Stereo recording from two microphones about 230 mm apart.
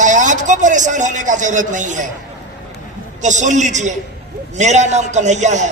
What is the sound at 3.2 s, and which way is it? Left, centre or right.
A woman's voice, right.